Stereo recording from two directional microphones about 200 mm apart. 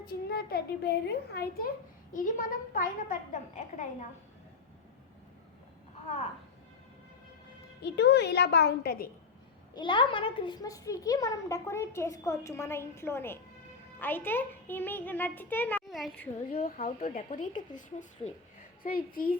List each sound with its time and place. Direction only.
0.0 s a child's voice: 50° left (ahead or behind)
7.8 s speech: 60° left (ahead or behind)
9.7 s a child's voice: 25° left (ahead or behind); by 16.3 s 5° left (ahead or behind)
16.6 s a child's voice: 45° left (ahead or behind)
17.2 s a child's voice: 35° left (ahead or behind)
18.8 s a child's voice: 45° left (ahead or behind)